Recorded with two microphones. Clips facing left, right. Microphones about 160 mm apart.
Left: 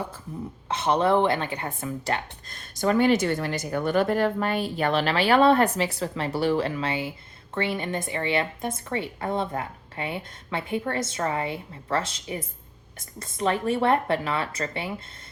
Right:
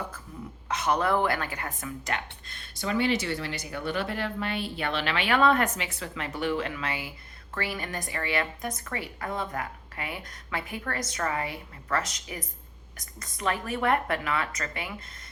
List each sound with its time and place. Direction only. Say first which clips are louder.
0.7 s a woman's voice: left 4 dB; 25° left (ahead or behind)